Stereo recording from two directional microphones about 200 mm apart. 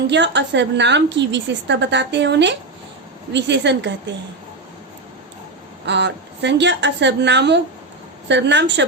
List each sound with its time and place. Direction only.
0.1 s a woman's voice: 60° right (ahead or behind)
5.8 s a woman's voice: 60° right (ahead or behind)